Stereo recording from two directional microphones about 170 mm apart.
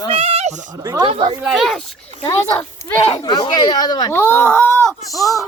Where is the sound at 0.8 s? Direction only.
20° right (ahead or behind).